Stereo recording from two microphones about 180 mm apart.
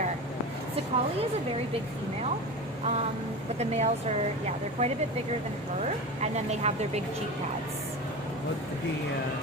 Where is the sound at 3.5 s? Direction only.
35° right (ahead or behind).